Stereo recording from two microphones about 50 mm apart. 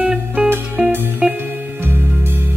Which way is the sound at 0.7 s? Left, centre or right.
Right.